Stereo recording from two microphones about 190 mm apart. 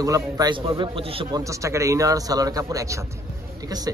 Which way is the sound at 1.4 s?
15° right (ahead or behind).